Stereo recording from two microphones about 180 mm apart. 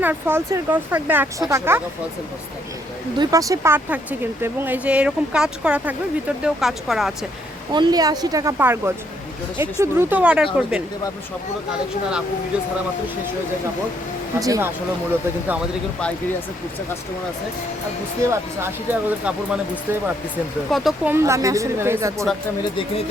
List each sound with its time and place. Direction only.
0.0 s speech: 10° right (ahead or behind)
3.2 s speech: 20° right (ahead or behind); by 7.1 s centre (ahead or behind)
7.7 s speech: 25° right (ahead or behind); by 10.8 s 5° right (ahead or behind)
14.3 s speech: 20° right (ahead or behind)
18.2 s speech: 15° right (ahead or behind)
20.7 s speech: centre (ahead or behind)
21.1 s speech: 15° right (ahead or behind)